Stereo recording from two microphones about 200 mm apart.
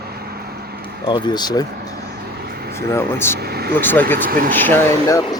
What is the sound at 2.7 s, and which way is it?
Speech, 15° left (ahead or behind).